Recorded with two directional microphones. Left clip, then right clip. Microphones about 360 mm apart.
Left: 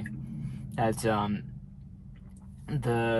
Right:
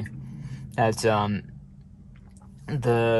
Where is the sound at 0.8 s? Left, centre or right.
Right.